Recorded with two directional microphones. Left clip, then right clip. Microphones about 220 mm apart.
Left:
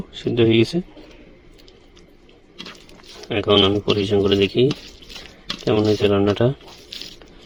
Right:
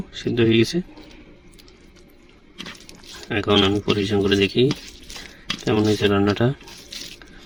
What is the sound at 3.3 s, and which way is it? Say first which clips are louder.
Speech: left 2 dB; 20° right (ahead or behind).